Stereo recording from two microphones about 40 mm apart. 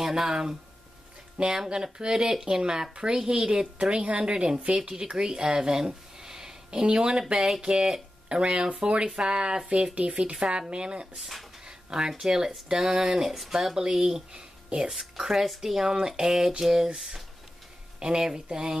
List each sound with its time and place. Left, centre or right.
0.0 s speech: centre
9.9 s speech: right
10.3 s speech: centre
11.6 s a sound: right
12.1 s speech: centre
13.3 s speech: centre
13.6 s speech: centre